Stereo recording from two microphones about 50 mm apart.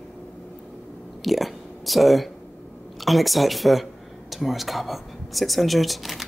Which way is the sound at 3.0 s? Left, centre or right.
Centre.